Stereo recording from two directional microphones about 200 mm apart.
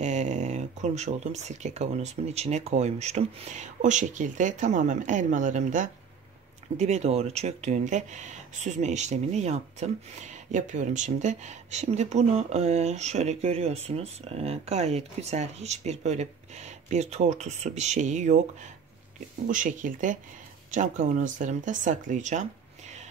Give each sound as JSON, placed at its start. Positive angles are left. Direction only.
{"t": 0.0, "sound": "speech", "side_deg": -35}